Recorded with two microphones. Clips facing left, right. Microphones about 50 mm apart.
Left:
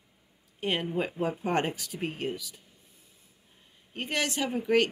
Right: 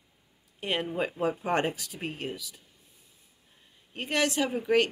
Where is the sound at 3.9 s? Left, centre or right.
Centre.